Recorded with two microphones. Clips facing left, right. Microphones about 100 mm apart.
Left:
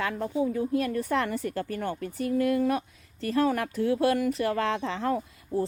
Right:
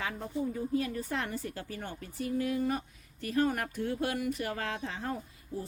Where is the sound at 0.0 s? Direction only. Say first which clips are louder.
Left 7 dB; 85° left.